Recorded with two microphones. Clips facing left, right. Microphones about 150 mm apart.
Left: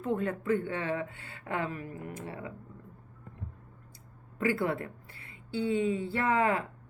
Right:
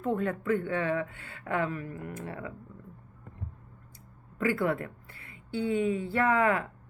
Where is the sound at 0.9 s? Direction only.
35° left (ahead or behind).